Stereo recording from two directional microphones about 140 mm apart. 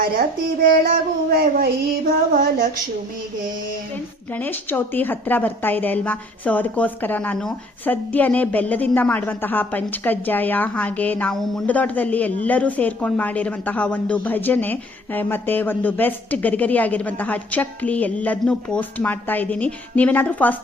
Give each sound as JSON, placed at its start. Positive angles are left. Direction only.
{"t": 0.2, "sound": "child singing", "side_deg": -90}
{"t": 4.4, "sound": "a woman's voice", "side_deg": 15}